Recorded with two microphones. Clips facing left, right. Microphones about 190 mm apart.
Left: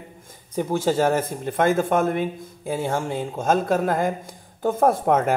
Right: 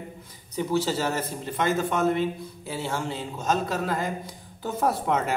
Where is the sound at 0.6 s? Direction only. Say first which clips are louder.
Left 4 dB; 50° left (ahead or behind).